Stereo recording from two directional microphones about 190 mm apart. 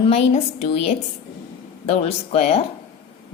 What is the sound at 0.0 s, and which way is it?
Speech, 35° left (ahead or behind).